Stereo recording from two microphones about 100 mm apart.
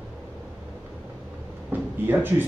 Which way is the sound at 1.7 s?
20° right (ahead or behind).